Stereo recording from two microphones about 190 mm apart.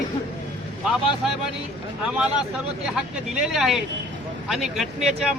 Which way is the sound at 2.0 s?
5° right (ahead or behind).